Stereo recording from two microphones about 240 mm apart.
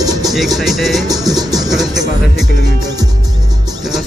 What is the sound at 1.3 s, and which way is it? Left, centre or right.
Music, centre.